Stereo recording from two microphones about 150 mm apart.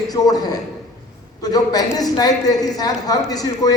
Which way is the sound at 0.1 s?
25° left (ahead or behind).